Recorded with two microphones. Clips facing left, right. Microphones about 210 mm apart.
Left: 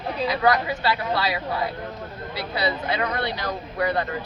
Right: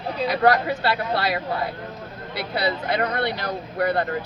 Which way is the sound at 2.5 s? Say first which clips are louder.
Right 2 dB; 55° right (ahead or behind).